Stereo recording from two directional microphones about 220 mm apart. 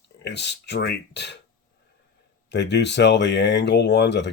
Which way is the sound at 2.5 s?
50° left (ahead or behind).